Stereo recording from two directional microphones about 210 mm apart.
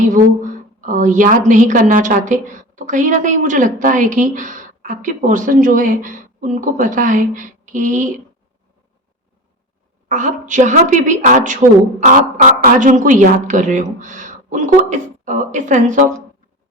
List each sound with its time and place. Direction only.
0.0 s a woman's voice: 35° right (ahead or behind)
10.1 s a woman's voice: 35° right (ahead or behind)